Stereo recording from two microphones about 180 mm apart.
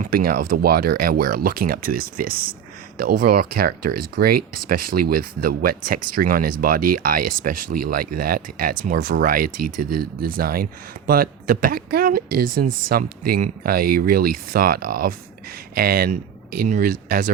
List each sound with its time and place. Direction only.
0.0 s speech: 55° right (ahead or behind)